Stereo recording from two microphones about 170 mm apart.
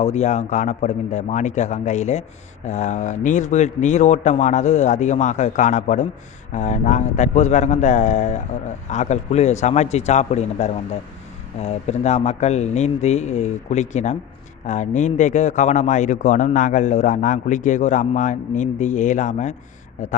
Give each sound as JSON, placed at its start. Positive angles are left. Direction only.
{"t": 0.0, "sound": "a man's voice", "side_deg": 40}